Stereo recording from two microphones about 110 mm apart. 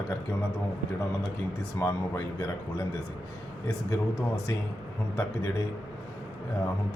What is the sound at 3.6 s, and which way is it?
Speech, 30° left (ahead or behind).